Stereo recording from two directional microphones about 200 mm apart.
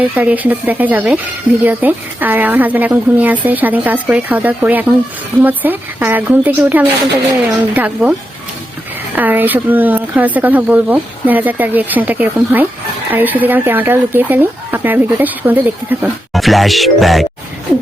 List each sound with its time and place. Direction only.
0.0 s speech: 10° right (ahead or behind)
9.1 s speech: 10° right (ahead or behind)